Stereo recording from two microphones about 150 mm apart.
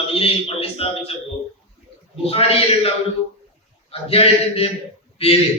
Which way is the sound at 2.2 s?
40° left (ahead or behind).